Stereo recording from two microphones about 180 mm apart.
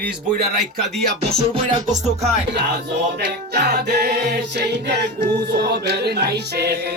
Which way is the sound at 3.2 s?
65° right (ahead or behind).